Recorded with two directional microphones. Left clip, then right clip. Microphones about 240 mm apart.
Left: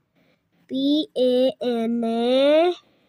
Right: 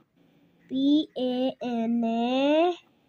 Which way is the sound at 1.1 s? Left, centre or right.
Left.